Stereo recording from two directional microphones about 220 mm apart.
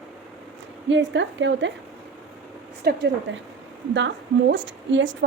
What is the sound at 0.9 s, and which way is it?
Speech, 55° right (ahead or behind).